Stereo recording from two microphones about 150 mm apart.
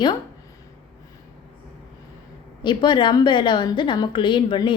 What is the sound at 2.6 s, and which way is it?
A woman's voice, 30° left (ahead or behind).